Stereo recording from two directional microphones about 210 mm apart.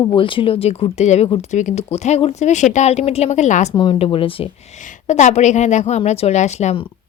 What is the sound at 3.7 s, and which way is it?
Speech, 20° left (ahead or behind).